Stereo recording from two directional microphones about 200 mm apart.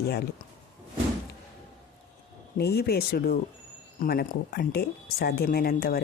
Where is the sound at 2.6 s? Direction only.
50° left (ahead or behind).